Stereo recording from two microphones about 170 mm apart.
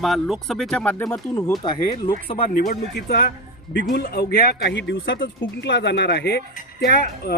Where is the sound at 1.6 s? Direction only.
30° left (ahead or behind).